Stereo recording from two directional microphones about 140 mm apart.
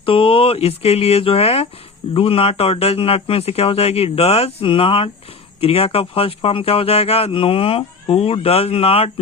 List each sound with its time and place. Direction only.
0.0 s a man's voice: 40° left (ahead or behind)